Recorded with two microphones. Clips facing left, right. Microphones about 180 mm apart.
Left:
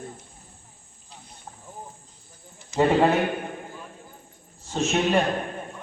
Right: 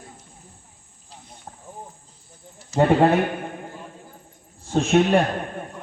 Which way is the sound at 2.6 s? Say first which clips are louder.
Right 3 dB; 40° right (ahead or behind).